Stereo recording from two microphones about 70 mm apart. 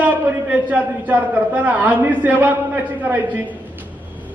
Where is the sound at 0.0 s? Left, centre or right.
Right.